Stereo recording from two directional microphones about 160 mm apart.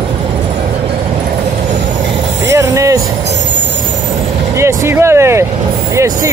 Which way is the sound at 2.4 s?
20° right (ahead or behind).